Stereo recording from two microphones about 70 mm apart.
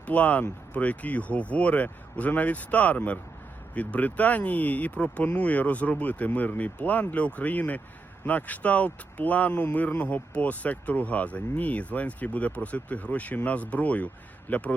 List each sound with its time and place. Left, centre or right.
0.0 s speech: left